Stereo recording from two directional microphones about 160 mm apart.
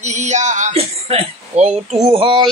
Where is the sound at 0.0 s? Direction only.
45° right (ahead or behind).